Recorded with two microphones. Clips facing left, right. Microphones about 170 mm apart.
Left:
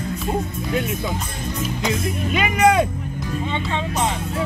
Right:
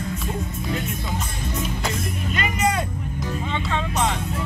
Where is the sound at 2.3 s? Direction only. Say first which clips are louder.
Left 7 dB; 90° left.